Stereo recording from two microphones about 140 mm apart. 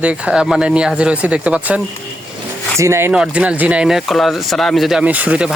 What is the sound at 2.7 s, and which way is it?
Speech, 20° right (ahead or behind).